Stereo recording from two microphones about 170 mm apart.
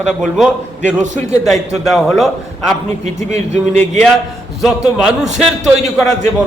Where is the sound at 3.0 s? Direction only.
45° right (ahead or behind).